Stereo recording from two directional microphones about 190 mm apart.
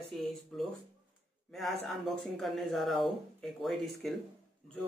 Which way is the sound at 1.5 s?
Centre (ahead or behind).